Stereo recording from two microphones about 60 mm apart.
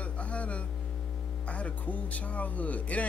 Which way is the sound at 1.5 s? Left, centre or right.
Left.